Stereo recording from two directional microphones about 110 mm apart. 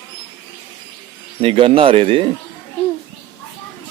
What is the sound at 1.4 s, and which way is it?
Speech, 55° right (ahead or behind).